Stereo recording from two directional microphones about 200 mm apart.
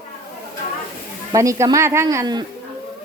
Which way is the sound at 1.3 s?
15° right (ahead or behind).